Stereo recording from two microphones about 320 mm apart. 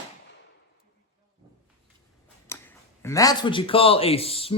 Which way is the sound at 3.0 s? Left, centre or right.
Centre.